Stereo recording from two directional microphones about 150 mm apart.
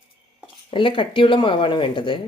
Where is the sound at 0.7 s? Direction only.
35° left (ahead or behind).